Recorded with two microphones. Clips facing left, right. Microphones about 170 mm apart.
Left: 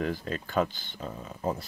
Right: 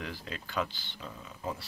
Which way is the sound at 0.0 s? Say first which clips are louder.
Left 9 dB; 45° left (ahead or behind).